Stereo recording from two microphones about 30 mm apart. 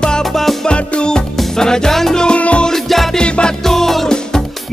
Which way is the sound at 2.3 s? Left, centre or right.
Left.